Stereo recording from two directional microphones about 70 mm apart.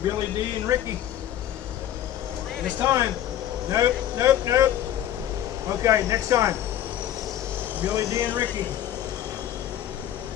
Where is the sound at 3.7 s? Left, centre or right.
Right.